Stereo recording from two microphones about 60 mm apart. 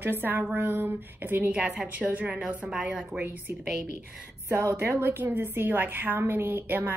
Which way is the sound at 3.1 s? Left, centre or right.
Right.